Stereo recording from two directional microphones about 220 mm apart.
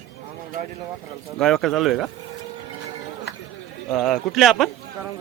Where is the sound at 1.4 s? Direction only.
Centre (ahead or behind).